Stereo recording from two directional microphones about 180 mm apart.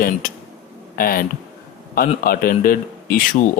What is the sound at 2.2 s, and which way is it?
Speech, 55° left (ahead or behind).